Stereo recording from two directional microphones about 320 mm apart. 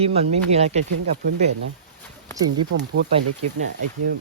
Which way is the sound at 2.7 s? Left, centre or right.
Right.